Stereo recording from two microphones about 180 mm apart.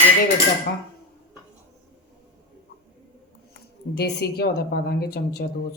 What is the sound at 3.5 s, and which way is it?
Speech, 60° left (ahead or behind).